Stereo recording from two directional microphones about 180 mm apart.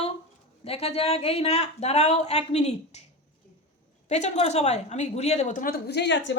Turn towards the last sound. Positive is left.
turn(degrees=85)